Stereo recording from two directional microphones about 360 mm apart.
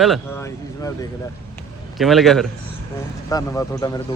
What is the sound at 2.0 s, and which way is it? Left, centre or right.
A man's voice, centre.